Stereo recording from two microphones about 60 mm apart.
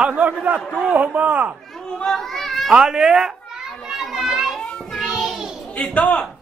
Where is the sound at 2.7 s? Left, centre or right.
Centre.